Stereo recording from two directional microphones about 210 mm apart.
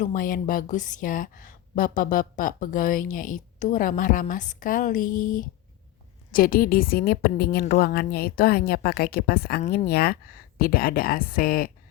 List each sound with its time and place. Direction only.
0.0 s a woman's voice: 40° left (ahead or behind)